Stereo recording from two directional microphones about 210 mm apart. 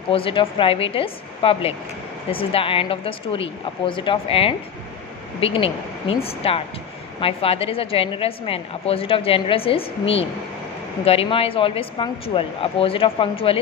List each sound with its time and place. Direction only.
0.1 s a woman's voice: 25° left (ahead or behind)